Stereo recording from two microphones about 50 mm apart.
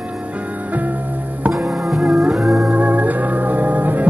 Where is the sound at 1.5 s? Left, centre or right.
Centre.